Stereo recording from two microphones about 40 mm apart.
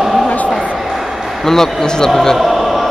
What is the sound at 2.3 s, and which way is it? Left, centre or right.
Music, centre.